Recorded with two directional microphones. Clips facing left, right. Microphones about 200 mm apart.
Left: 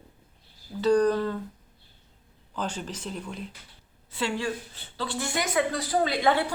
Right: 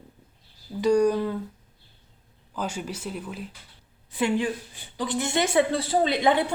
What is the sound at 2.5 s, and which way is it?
Speech, 10° right (ahead or behind).